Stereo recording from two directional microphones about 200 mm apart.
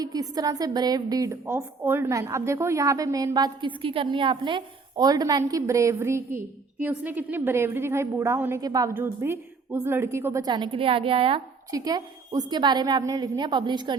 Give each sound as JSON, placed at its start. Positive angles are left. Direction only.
{"t": 0.0, "sound": "a woman's voice", "side_deg": -20}